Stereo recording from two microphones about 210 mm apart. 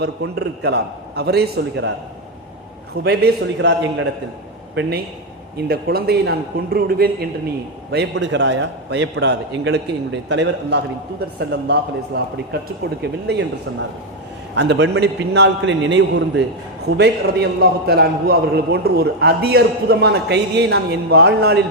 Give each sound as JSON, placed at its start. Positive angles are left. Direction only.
{"t": 0.0, "sound": "a man's voice", "side_deg": -50}
{"t": 3.0, "sound": "a man's voice", "side_deg": -50}